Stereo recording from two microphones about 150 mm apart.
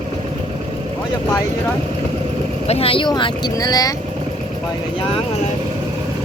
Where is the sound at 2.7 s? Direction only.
40° left (ahead or behind); by 3.9 s 25° left (ahead or behind).